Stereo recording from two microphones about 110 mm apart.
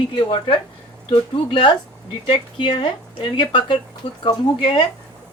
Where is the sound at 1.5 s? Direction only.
50° left (ahead or behind).